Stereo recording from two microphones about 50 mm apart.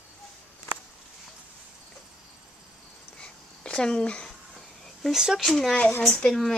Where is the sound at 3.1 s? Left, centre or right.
Centre.